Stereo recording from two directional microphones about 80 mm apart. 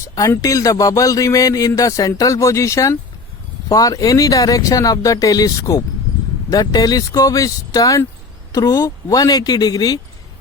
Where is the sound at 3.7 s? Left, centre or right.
Left.